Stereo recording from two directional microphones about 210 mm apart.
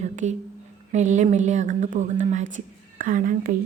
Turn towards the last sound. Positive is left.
turn(degrees=-40)  # may be behind; listen again after turning